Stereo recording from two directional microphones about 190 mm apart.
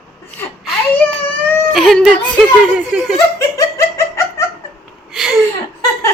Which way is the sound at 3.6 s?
15° left (ahead or behind).